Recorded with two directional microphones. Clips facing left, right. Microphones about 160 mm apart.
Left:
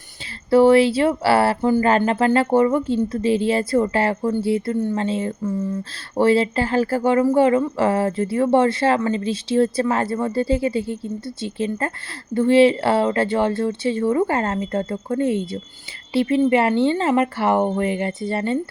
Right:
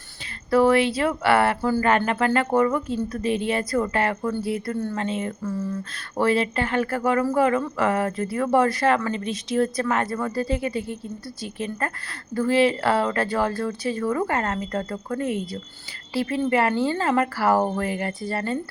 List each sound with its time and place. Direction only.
0.5 s speech: 30° left (ahead or behind)